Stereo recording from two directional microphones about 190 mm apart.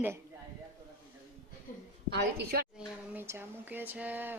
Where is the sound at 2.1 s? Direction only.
55° right (ahead or behind).